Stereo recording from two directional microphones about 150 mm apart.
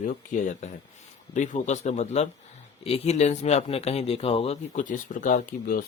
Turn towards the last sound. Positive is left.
turn(degrees=65)  # may be behind; listen again after turning